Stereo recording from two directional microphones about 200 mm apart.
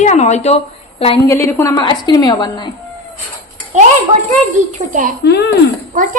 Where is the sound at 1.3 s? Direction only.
15° left (ahead or behind).